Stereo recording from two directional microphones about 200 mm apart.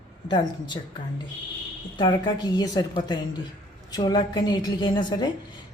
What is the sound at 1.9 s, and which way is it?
Speech, 20° left (ahead or behind).